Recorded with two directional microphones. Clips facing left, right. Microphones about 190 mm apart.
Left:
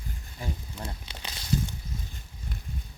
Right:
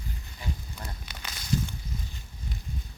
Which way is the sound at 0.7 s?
30° left (ahead or behind).